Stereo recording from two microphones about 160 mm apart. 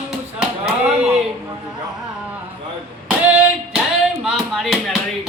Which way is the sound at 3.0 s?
10° right (ahead or behind).